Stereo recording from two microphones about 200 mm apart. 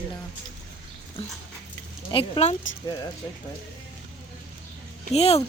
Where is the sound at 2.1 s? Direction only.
30° left (ahead or behind).